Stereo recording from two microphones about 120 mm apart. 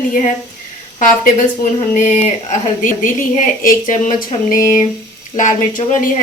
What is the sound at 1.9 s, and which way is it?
A woman's voice, 75° left (ahead or behind).